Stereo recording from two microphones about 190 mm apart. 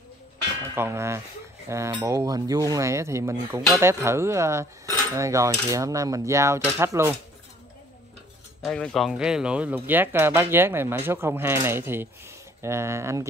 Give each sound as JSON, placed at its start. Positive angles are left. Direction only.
{"t": 0.7, "sound": "speech", "side_deg": -15}
{"t": 8.6, "sound": "speech", "side_deg": 0}